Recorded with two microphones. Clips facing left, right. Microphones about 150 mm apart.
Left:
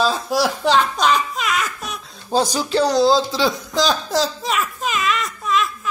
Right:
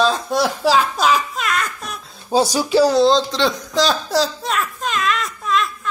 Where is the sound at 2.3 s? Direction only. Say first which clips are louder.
Right 2 dB; 10° right (ahead or behind).